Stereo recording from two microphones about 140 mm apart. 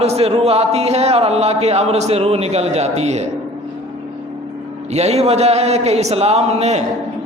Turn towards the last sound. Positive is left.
turn(degrees=-50)  # may be behind; listen again after turning